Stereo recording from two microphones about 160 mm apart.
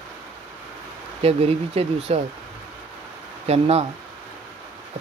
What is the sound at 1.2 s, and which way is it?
Speech, 40° right (ahead or behind).